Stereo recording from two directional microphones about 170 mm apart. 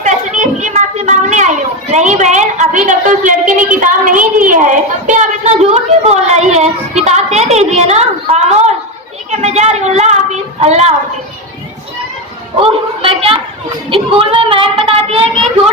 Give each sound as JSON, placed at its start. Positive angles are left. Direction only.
{"t": 0.0, "sound": "a child's voice", "side_deg": -45}
{"t": 5.5, "sound": "speech", "side_deg": -40}
{"t": 13.0, "sound": "speech", "side_deg": -30}